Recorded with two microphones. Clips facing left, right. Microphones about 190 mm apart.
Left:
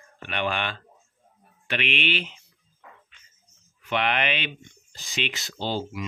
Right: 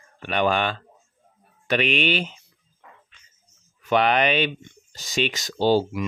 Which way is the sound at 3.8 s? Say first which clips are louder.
Right 6 dB; 40° right (ahead or behind).